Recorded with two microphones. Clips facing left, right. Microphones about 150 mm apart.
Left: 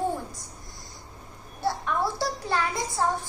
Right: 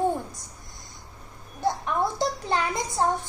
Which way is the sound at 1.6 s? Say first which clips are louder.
Right 2 dB; 20° right (ahead or behind).